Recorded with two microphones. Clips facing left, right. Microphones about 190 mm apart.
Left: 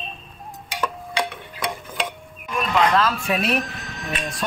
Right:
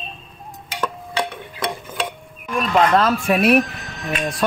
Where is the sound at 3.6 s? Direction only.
Centre (ahead or behind).